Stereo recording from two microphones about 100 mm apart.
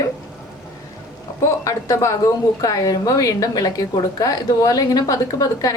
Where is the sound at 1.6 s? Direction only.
30° left (ahead or behind).